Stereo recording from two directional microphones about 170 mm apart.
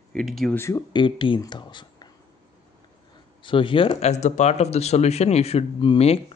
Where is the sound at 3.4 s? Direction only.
30° left (ahead or behind).